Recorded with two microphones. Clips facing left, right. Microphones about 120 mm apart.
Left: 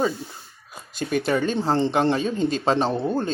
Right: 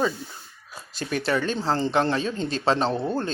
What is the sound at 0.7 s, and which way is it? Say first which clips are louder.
Speech: left 4 dB; 50° left (ahead or behind).